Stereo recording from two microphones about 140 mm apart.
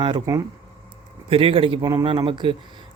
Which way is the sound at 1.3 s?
40° right (ahead or behind).